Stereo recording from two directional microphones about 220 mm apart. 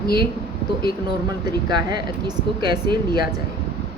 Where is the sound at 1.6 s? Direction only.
20° right (ahead or behind).